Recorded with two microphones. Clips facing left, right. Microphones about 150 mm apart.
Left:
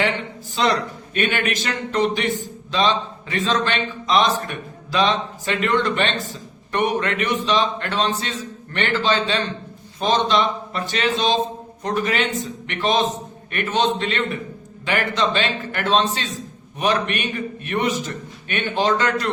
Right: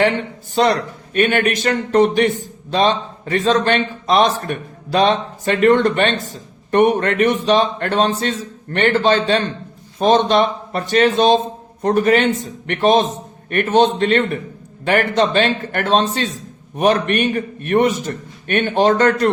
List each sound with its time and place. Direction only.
0.6 s a man's voice: 50° right (ahead or behind)